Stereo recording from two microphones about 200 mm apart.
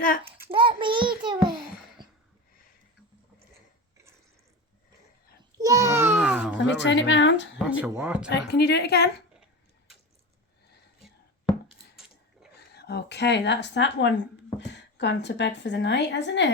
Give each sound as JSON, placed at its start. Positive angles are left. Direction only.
{"t": 0.3, "sound": "child singing", "side_deg": -10}
{"t": 0.5, "sound": "child singing", "side_deg": -25}
{"t": 2.0, "sound": "a sound", "side_deg": -20}
{"t": 5.5, "sound": "a child's voice", "side_deg": -20}
{"t": 6.6, "sound": "speech", "side_deg": 65}
{"t": 7.7, "sound": "speech", "side_deg": -10}
{"t": 8.3, "sound": "speech", "side_deg": 55}
{"t": 11.0, "sound": "a sound", "side_deg": 0}
{"t": 12.5, "sound": "speech", "side_deg": 55}